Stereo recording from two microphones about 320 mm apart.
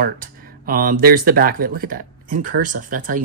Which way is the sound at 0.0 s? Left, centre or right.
Right.